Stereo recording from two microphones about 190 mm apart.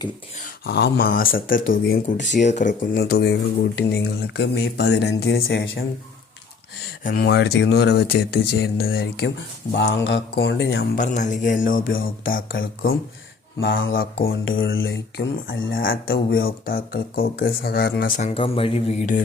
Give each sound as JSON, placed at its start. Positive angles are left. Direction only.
{"t": 0.4, "sound": "speech", "side_deg": 60}
{"t": 7.0, "sound": "speech", "side_deg": 50}
{"t": 10.9, "sound": "speech", "side_deg": 40}
{"t": 13.6, "sound": "mantra", "side_deg": 90}
{"t": 13.9, "sound": "speech", "side_deg": 50}
{"t": 14.7, "sound": "mantra", "side_deg": 90}
{"t": 15.9, "sound": "speech", "side_deg": 50}
{"t": 18.2, "sound": "speech", "side_deg": 35}